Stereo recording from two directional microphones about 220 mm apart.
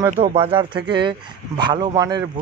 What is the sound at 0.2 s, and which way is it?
Speech, 25° right (ahead or behind).